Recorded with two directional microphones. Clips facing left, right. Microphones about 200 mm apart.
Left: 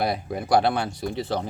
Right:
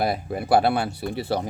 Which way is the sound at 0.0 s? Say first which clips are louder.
Right 1 dB; 5° right (ahead or behind).